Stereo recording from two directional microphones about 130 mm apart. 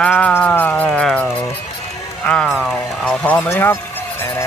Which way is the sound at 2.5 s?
Centre (ahead or behind).